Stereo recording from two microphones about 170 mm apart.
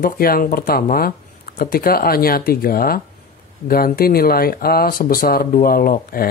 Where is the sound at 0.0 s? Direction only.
60° left (ahead or behind).